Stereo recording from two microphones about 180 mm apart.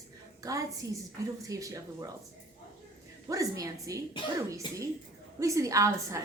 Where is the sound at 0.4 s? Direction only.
20° right (ahead or behind).